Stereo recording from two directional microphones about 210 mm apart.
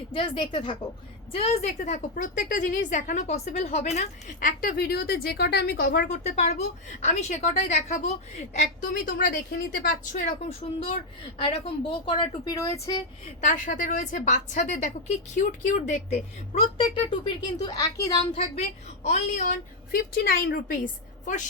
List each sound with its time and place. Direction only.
0.1 s a woman's voice: 25° left (ahead or behind)
10.6 s speech: 25° left (ahead or behind)
12.0 s speech: 25° left (ahead or behind)
13.4 s a woman's voice: 40° left (ahead or behind)
16.7 s speech: 25° left (ahead or behind)
18.3 s a woman's voice: 30° left (ahead or behind)